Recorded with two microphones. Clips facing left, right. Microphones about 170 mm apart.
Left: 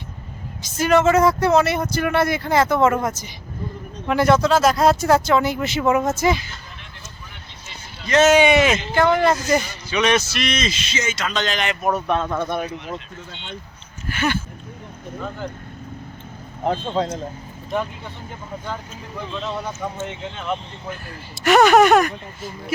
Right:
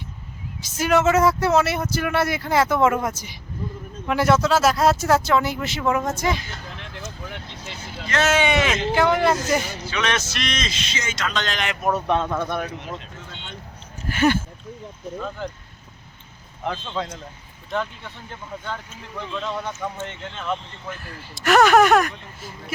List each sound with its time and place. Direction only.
0.6 s speech: 10° right (ahead or behind)
6.7 s a sound: 90° right
8.0 s speech: 20° left (ahead or behind)
9.0 s speech: 5° right (ahead or behind)
9.9 s speech: 15° left (ahead or behind)
14.1 s speech: 40° right (ahead or behind)
16.7 s speech: 45° left (ahead or behind)
19.5 s speech: 5° left (ahead or behind)